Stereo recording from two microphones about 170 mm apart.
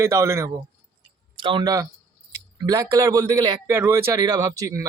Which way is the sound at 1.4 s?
25° right (ahead or behind).